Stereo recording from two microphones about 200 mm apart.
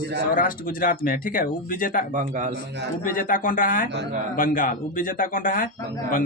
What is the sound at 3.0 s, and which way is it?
Speech, 45° left (ahead or behind).